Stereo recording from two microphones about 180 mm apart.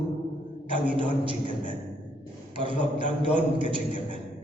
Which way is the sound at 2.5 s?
30° right (ahead or behind).